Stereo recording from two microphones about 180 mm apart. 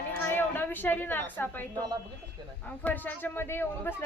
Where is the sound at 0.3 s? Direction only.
10° left (ahead or behind).